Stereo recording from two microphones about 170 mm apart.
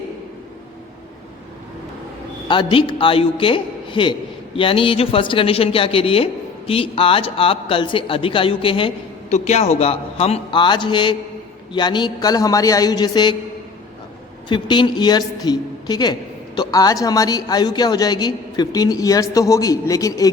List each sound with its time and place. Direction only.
2.5 s a man's voice: 30° left (ahead or behind)
14.5 s a man's voice: 25° left (ahead or behind)